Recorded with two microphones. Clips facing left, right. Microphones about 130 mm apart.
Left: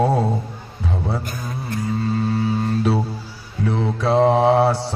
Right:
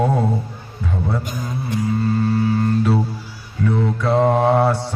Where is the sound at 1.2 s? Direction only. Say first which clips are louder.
Right 3 dB; 15° right (ahead or behind).